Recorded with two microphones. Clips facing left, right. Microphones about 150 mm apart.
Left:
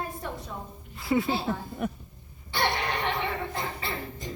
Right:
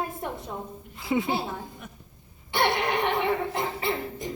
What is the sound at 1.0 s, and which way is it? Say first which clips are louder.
Speech: even; 20° right (ahead or behind).